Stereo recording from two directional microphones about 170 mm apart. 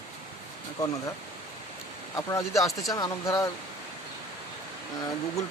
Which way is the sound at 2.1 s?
15° left (ahead or behind).